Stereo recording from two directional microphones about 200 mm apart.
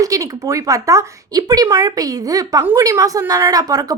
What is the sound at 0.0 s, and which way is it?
Speech, 15° right (ahead or behind).